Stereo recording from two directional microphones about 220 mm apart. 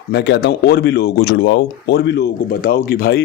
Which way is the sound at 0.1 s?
50° left (ahead or behind).